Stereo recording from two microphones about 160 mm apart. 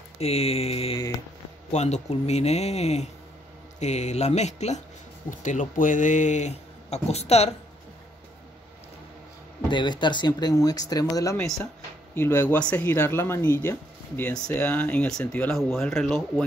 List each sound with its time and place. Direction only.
0.2 s mantra: 40° left (ahead or behind)
1.7 s speech: 45° left (ahead or behind)
9.7 s speech: 30° left (ahead or behind)
11.3 s speech: centre (ahead or behind)